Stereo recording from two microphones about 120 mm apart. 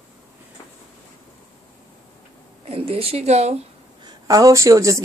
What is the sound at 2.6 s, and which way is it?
Speech, 55° right (ahead or behind).